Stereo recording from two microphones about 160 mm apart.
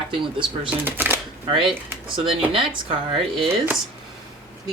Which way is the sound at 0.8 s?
15° right (ahead or behind).